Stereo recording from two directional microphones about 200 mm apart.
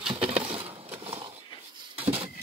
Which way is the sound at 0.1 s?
30° right (ahead or behind).